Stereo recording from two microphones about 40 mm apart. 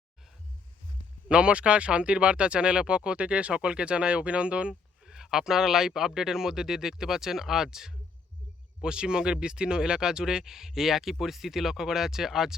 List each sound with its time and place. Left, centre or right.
1.3 s speech: right
5.0 s speech: centre